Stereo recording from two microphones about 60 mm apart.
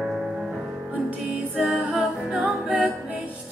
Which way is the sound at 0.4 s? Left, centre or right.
Centre.